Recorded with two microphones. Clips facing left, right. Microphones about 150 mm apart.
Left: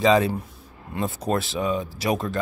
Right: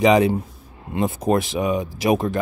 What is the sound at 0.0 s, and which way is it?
Speech, 15° right (ahead or behind).